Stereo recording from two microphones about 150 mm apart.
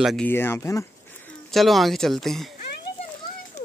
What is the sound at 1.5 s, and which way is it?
Speech, centre (ahead or behind).